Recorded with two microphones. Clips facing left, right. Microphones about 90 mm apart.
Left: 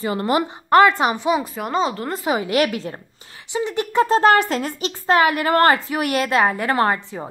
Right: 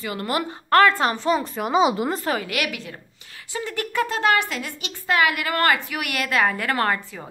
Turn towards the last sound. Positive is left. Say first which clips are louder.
# left 4 dB
turn(degrees=25)  # may be behind; listen again after turning